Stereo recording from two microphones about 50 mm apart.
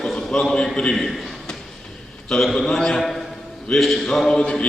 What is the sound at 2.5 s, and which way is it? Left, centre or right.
A man's voice, centre.